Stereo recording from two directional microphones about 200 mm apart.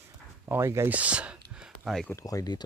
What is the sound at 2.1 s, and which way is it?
Speech, 15° left (ahead or behind).